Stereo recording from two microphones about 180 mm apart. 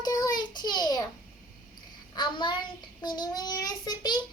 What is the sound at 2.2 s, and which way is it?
Child singing, 25° left (ahead or behind).